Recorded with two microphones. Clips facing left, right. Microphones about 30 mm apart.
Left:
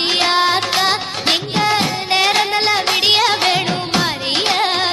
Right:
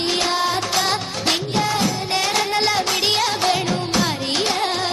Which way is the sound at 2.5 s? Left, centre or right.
Left.